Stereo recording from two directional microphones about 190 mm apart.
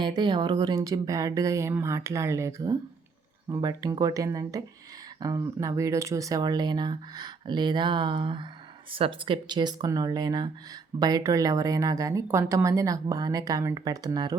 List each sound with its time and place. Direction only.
0.0 s a woman's voice: 25° right (ahead or behind)